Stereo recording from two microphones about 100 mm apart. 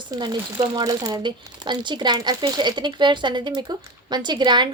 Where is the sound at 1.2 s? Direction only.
50° right (ahead or behind).